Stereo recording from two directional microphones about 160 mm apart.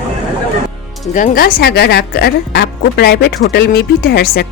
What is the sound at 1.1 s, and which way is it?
Speech, 60° left (ahead or behind).